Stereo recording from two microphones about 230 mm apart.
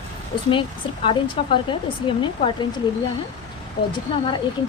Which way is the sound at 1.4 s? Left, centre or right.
Left.